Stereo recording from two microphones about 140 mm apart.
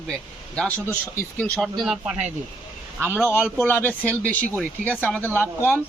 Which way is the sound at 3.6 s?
15° left (ahead or behind).